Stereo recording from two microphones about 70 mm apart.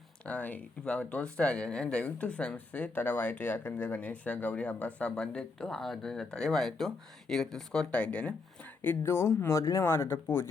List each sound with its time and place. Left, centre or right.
0.3 s speech: left
8.8 s speech: left
9.1 s speech: left